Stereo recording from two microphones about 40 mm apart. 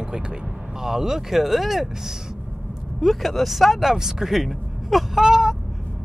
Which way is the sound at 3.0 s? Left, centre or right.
Centre.